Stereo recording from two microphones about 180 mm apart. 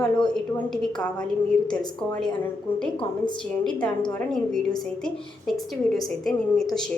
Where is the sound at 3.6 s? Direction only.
5° left (ahead or behind).